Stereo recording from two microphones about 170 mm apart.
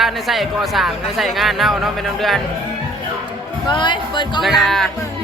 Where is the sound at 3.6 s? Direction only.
25° left (ahead or behind).